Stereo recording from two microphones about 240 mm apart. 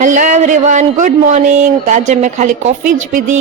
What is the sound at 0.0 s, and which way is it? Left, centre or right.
A man's voice, right.